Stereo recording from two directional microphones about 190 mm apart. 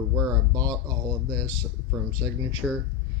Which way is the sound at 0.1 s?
15° right (ahead or behind).